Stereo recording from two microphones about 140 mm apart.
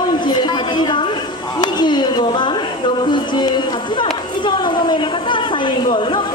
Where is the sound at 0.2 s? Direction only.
30° left (ahead or behind).